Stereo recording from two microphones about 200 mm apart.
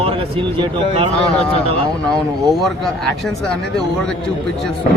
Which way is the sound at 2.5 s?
Centre (ahead or behind).